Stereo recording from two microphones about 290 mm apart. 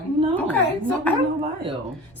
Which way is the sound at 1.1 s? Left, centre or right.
Centre.